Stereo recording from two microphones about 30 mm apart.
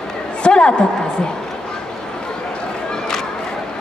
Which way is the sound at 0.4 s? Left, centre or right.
Left.